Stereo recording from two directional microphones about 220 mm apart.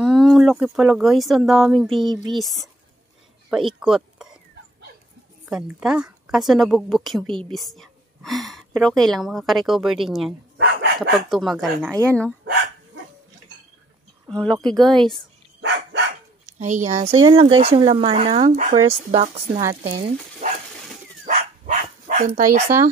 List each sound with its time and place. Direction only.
0.0 s speech: centre (ahead or behind)
3.4 s a sound: centre (ahead or behind)
5.4 s speech: 5° right (ahead or behind)
10.6 s dog: 50° right (ahead or behind)
11.0 s speech: centre (ahead or behind)
14.4 s speech: 5° left (ahead or behind)
16.5 s speech: 35° right (ahead or behind)
17.1 s speech: 20° right (ahead or behind)
19.8 s stir: 40° right (ahead or behind)
21.3 s dog: 35° right (ahead or behind)